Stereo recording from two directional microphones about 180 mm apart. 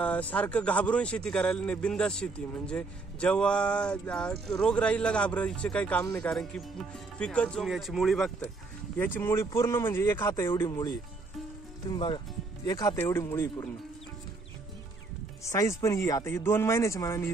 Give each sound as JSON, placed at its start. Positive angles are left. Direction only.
{"t": 0.0, "sound": "a man's voice", "side_deg": 10}
{"t": 11.9, "sound": "speech", "side_deg": 25}
{"t": 15.4, "sound": "speech", "side_deg": 15}